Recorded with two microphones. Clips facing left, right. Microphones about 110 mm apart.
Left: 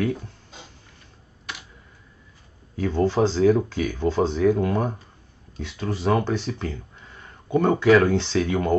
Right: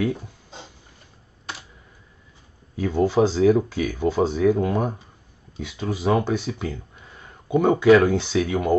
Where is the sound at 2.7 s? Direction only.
10° right (ahead or behind).